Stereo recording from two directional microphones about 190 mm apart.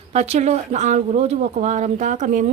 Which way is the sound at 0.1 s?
35° right (ahead or behind).